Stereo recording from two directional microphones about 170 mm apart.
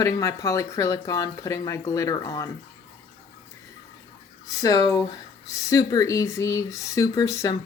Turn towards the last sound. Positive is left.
turn(degrees=20)  # may be behind; listen again after turning